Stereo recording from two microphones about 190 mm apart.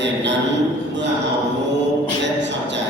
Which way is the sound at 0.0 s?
70° right (ahead or behind).